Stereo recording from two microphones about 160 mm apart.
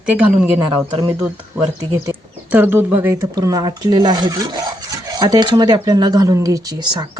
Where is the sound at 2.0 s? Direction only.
10° right (ahead or behind).